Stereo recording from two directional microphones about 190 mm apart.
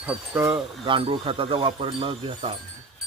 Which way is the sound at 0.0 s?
15° right (ahead or behind).